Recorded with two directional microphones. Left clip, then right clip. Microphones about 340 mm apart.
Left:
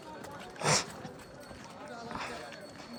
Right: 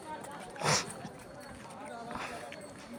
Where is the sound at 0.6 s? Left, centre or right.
Centre.